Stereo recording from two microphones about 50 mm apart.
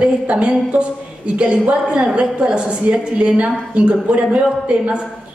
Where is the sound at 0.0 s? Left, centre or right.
Centre.